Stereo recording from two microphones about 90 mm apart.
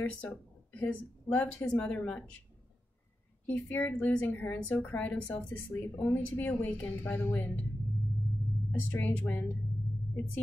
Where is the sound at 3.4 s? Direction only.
20° left (ahead or behind).